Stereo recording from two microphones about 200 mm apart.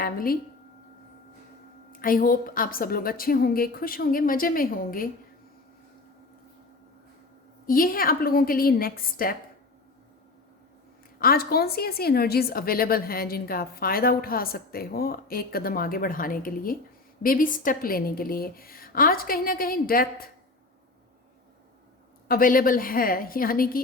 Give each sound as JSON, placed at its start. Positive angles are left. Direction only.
{"t": 0.0, "sound": "a woman's voice", "side_deg": 45}
{"t": 1.9, "sound": "a woman's voice", "side_deg": 45}
{"t": 7.7, "sound": "a woman's voice", "side_deg": 45}
{"t": 11.2, "sound": "a woman's voice", "side_deg": 50}
{"t": 22.3, "sound": "a woman's voice", "side_deg": 45}